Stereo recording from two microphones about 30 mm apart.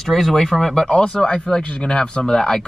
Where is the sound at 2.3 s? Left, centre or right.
Centre.